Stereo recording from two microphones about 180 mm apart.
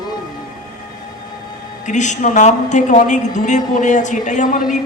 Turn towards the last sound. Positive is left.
turn(degrees=45)  # may be behind; listen again after turning